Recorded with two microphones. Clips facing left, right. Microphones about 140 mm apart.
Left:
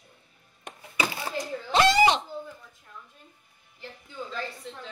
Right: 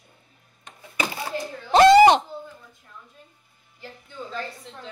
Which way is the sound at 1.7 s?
45° right (ahead or behind).